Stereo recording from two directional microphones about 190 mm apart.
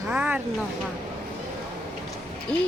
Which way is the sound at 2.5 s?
5° left (ahead or behind).